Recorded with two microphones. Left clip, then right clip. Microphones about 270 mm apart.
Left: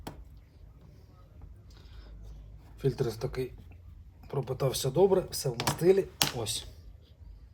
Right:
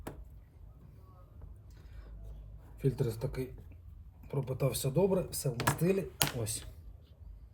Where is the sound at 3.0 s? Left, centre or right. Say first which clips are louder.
Left 4 dB; centre.